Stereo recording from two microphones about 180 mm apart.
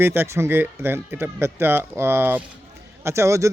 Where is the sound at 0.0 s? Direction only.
10° right (ahead or behind).